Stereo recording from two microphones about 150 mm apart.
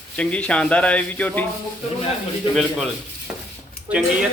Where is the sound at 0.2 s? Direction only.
5° left (ahead or behind).